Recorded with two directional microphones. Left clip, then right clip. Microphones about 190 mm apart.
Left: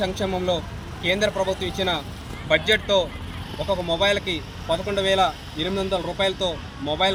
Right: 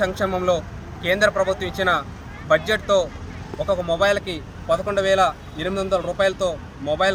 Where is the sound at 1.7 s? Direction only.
15° right (ahead or behind).